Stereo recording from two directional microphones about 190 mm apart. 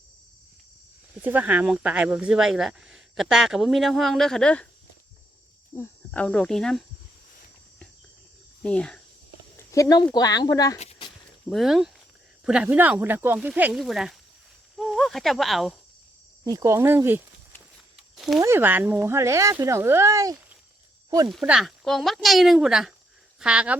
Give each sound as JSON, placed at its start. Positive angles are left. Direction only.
{"t": 1.2, "sound": "speech", "side_deg": -10}
{"t": 5.7, "sound": "speech", "side_deg": 10}
{"t": 8.6, "sound": "speech", "side_deg": 5}
{"t": 9.6, "sound": "a sound", "side_deg": 15}
{"t": 10.2, "sound": "speech", "side_deg": 20}
{"t": 11.4, "sound": "speech", "side_deg": 0}
{"t": 16.4, "sound": "speech", "side_deg": -15}
{"t": 18.3, "sound": "speech", "side_deg": -15}
{"t": 21.2, "sound": "speech", "side_deg": -5}